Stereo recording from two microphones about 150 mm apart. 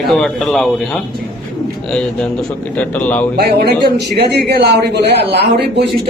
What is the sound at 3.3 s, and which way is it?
A man's voice, 90° right.